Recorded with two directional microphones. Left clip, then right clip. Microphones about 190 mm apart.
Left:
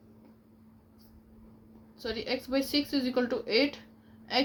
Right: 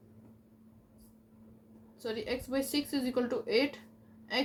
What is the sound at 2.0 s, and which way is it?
A woman's voice, 45° left (ahead or behind).